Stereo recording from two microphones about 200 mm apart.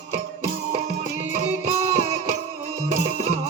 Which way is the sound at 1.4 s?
30° right (ahead or behind).